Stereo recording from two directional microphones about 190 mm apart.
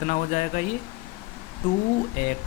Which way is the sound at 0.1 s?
40° left (ahead or behind).